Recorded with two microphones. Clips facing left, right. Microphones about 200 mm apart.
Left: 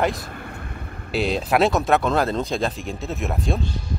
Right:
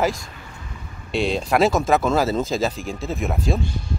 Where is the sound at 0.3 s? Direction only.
60° left (ahead or behind).